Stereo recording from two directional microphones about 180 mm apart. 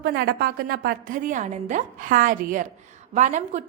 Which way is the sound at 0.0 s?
65° right (ahead or behind).